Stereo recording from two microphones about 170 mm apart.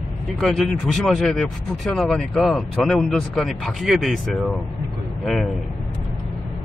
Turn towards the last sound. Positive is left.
turn(degrees=0)  # may be behind; listen again after turning